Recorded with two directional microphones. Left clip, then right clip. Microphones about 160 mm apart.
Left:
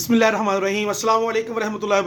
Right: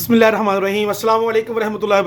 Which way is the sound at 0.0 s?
20° right (ahead or behind).